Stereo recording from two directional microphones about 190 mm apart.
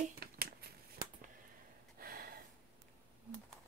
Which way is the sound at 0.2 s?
55° right (ahead or behind).